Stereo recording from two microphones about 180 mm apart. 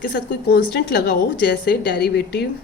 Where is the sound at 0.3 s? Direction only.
65° left (ahead or behind).